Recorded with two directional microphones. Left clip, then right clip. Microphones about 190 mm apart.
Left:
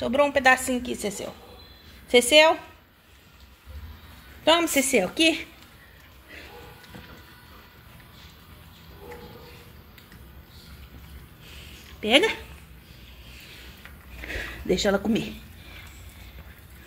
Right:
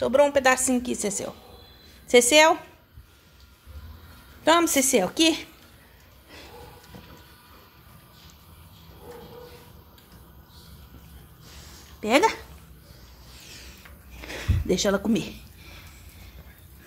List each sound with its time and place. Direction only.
0.0 s a woman's voice: 15° right (ahead or behind)
4.5 s a woman's voice: 10° right (ahead or behind)
12.0 s speech: 5° right (ahead or behind)
14.2 s a sound: 10° right (ahead or behind)